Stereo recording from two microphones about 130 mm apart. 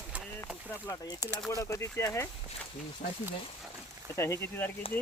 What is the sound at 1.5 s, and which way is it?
Speech, 25° left (ahead or behind).